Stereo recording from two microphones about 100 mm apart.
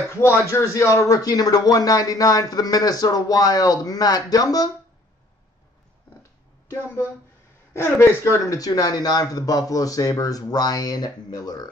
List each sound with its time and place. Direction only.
0.5 s speech: 30° left (ahead or behind)
7.7 s speech: 25° left (ahead or behind); by 11.7 s 40° left (ahead or behind)